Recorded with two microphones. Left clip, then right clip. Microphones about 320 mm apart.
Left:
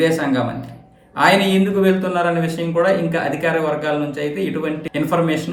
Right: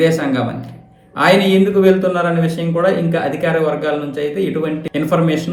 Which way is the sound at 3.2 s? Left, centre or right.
Left.